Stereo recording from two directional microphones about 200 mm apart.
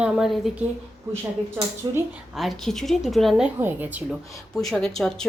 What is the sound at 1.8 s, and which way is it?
Speech, 20° right (ahead or behind).